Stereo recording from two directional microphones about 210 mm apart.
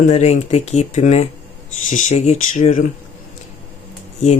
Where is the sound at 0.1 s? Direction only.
30° left (ahead or behind).